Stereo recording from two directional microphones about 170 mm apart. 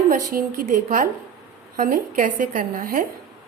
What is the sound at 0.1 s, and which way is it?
A woman's voice, 55° right (ahead or behind).